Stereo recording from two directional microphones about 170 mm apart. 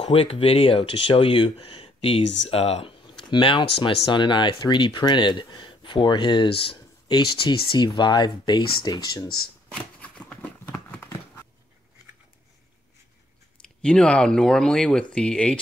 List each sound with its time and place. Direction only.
0.0 s speech: 35° left (ahead or behind)
9.7 s a sound: 5° left (ahead or behind)
13.8 s speech: 5° left (ahead or behind)